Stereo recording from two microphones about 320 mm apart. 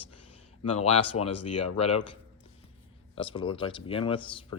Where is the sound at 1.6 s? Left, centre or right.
Centre.